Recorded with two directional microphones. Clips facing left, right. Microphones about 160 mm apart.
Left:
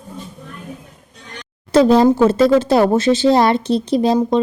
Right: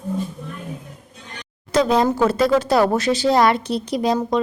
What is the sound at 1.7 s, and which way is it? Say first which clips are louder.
A woman's voice: left 6 dB; 30° left (ahead or behind).